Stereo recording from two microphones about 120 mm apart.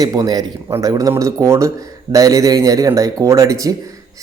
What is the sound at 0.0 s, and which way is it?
Speech, 30° right (ahead or behind).